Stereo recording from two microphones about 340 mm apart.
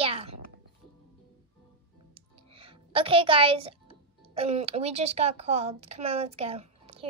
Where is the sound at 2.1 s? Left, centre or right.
Centre.